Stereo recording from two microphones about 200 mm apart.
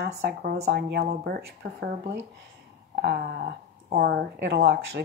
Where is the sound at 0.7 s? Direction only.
55° right (ahead or behind).